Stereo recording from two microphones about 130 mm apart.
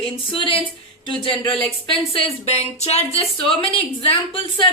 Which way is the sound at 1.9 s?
45° left (ahead or behind).